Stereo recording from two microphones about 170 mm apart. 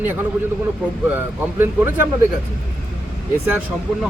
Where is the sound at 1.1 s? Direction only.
10° right (ahead or behind).